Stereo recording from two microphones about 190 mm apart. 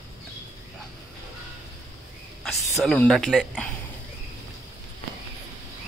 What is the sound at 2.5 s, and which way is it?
Speech, centre (ahead or behind).